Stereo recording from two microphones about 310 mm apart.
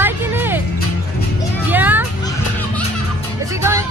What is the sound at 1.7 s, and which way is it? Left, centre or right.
Speech, centre.